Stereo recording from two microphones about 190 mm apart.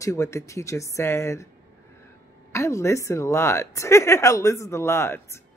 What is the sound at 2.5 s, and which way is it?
Speech, 15° left (ahead or behind).